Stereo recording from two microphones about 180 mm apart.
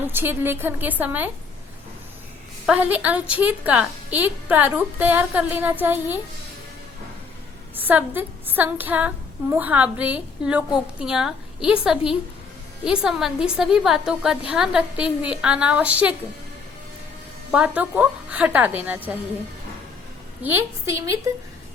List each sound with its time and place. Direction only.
0.0 s female singing: 10° right (ahead or behind)
2.6 s female singing: 10° right (ahead or behind)
7.8 s female singing: 10° right (ahead or behind)
12.8 s a woman's voice: 5° right (ahead or behind)
17.5 s female singing: 10° right (ahead or behind)
20.4 s female singing: 10° right (ahead or behind)